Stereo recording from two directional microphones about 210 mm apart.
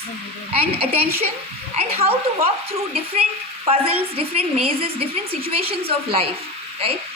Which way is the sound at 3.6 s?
25° right (ahead or behind).